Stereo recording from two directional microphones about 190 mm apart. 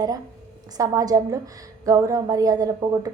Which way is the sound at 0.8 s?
20° right (ahead or behind).